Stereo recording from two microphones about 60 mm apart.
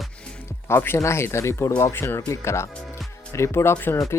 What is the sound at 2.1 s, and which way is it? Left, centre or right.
Speech, left.